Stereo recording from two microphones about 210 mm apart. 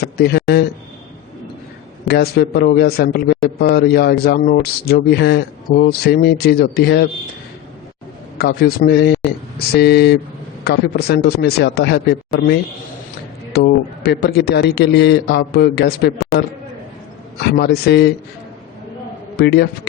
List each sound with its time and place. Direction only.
0.0 s speech: 50° left (ahead or behind)
2.0 s speech: 50° left (ahead or behind)
8.4 s speech: 50° left (ahead or behind)
17.4 s speech: 50° left (ahead or behind)
19.4 s speech: 50° left (ahead or behind)